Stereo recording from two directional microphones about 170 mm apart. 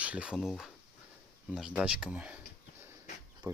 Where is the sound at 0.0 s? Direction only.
5° right (ahead or behind).